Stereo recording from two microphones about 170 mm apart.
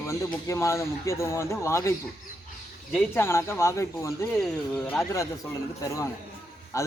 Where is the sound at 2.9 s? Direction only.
15° left (ahead or behind).